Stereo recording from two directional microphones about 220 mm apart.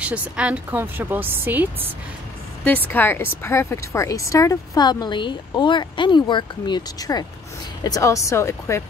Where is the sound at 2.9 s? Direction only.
10° left (ahead or behind).